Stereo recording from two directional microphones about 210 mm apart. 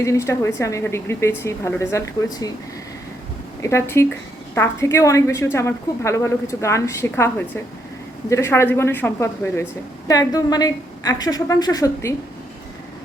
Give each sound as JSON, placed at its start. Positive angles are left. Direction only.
{"t": 0.0, "sound": "a woman's voice", "side_deg": 15}
{"t": 3.6, "sound": "a woman's voice", "side_deg": 15}